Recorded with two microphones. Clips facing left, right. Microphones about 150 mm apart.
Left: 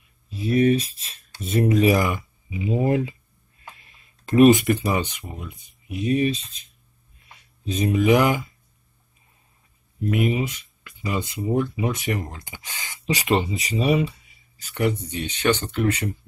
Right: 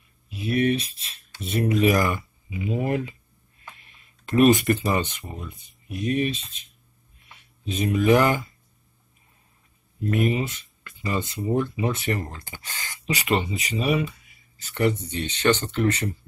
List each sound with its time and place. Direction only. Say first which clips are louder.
1.4 s speech: left 3 dB; 45° left (ahead or behind)
1.9 s speech: left 1 dB; 15° left (ahead or behind)
2.6 s speech: left 4 dB; 30° left (ahead or behind)
4.5 s speech: left 2 dB; 15° left (ahead or behind)
6.0 s speech: left 3 dB; 25° left (ahead or behind)
7.2 s a sound: left 2 dB; 40° left (ahead or behind)
7.9 s speech: even; 15° left (ahead or behind)
10.0 s speech: left 1 dB; 10° left (ahead or behind)
13.0 s speech: left 3 dB; 35° left (ahead or behind)
14.6 s speech: even; 10° left (ahead or behind)